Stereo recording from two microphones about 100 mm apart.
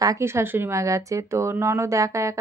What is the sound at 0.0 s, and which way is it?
Speech, 30° right (ahead or behind).